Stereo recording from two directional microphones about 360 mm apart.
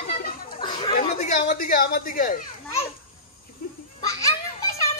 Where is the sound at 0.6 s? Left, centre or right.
Centre.